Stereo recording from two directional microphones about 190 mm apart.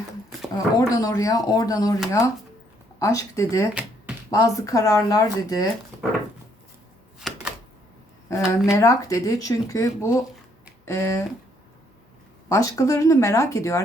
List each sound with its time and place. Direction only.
0.5 s speech: 15° left (ahead or behind)
7.3 s typewriter: centre (ahead or behind)
8.7 s speech: 15° left (ahead or behind)
12.5 s speech: 15° left (ahead or behind)